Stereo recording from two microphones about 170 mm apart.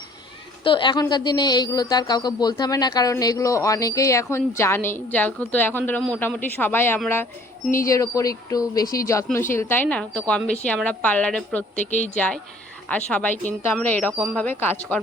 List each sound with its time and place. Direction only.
0.6 s a woman's voice: 30° left (ahead or behind); by 11.6 s 5° left (ahead or behind)
11.9 s speech: 45° left (ahead or behind)
12.1 s a woman's voice: 5° left (ahead or behind)
14.1 s speech: 15° right (ahead or behind)
14.3 s a woman's voice: 10° left (ahead or behind)